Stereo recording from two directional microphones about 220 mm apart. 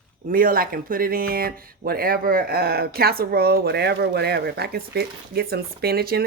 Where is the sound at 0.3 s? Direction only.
40° right (ahead or behind).